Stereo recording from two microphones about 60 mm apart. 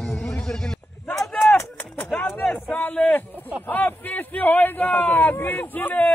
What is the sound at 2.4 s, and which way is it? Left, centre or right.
Speech, centre.